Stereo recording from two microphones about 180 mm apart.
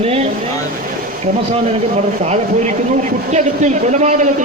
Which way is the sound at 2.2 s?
40° right (ahead or behind).